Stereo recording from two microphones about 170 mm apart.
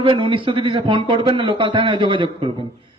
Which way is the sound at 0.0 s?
30° right (ahead or behind).